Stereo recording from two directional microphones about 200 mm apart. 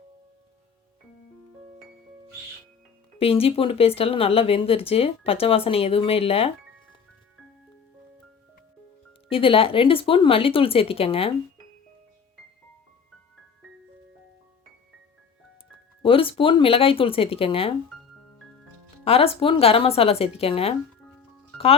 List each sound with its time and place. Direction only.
3.2 s speech: 30° left (ahead or behind)
9.3 s speech: 30° left (ahead or behind)
16.0 s speech: 25° left (ahead or behind)
19.0 s speech: 30° left (ahead or behind)